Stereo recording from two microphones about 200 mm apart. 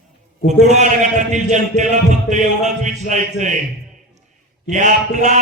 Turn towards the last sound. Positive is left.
turn(degrees=-35)  # may be behind; listen again after turning